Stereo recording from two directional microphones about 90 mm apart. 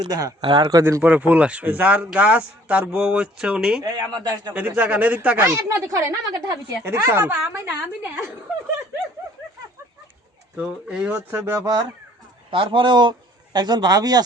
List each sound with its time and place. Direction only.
0.1 s a man's voice: 40° right (ahead or behind)
0.4 s a man's voice: 55° right (ahead or behind)
0.8 s a woman's voice: 35° right (ahead or behind)
1.0 s speech: 15° right (ahead or behind)
3.8 s a man's voice: 45° right (ahead or behind)
4.5 s speech: 20° right (ahead or behind)
5.4 s a woman's voice: 35° right (ahead or behind)
7.7 s speech: 15° right (ahead or behind)
10.6 s speech: 10° right (ahead or behind)
11.5 s a woman's voice: 40° right (ahead or behind)
12.5 s a man's voice: 70° right (ahead or behind); by 14.2 s 45° right (ahead or behind)